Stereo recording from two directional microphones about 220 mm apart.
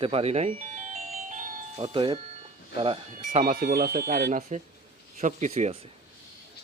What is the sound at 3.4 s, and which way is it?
Speech, 40° right (ahead or behind).